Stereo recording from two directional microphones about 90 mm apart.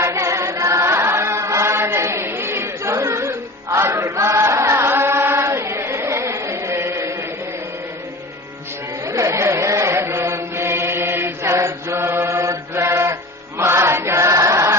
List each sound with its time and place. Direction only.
0.0 s chant: 35° right (ahead or behind)
9.1 s chant: 35° right (ahead or behind)